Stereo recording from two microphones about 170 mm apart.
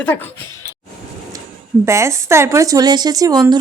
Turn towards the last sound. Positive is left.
turn(degrees=-25)  # may be behind; listen again after turning